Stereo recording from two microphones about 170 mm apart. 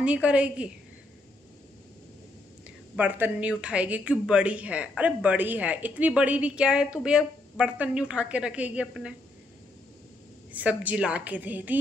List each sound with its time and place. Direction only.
0.0 s speech: 5° right (ahead or behind)
3.0 s speech: 10° right (ahead or behind)
10.5 s speech: 10° right (ahead or behind)